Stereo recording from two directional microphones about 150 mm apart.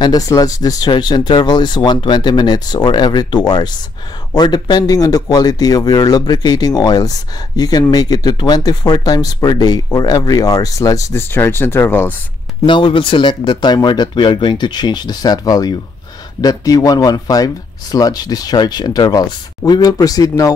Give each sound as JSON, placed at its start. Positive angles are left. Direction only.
{"t": 0.0, "sound": "speech", "side_deg": 25}
{"t": 12.6, "sound": "speech", "side_deg": 35}